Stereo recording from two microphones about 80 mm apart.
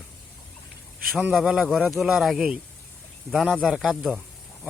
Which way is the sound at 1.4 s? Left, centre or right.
Centre.